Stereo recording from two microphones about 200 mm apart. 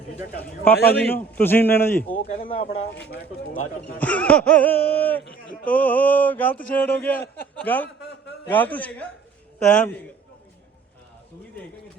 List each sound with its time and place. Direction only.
0.7 s a man's voice: 50° left (ahead or behind)
0.9 s speech: 10° left (ahead or behind)
2.1 s speech: 40° left (ahead or behind)
4.0 s speech: 5° left (ahead or behind)